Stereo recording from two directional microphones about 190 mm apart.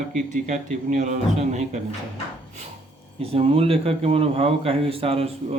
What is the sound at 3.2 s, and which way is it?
A man's voice, 30° right (ahead or behind).